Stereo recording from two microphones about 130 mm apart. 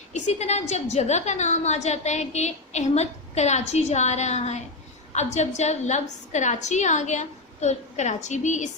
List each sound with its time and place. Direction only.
0.1 s a woman's voice: 60° left (ahead or behind)